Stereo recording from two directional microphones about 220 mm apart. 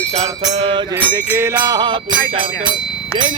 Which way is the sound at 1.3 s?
10° right (ahead or behind).